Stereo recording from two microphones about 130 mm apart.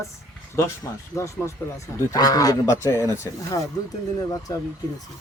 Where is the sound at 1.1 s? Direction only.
20° left (ahead or behind).